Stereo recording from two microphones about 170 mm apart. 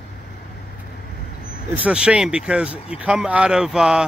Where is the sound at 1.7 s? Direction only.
5° right (ahead or behind).